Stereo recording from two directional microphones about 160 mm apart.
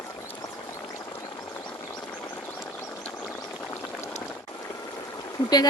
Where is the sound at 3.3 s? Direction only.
5° left (ahead or behind).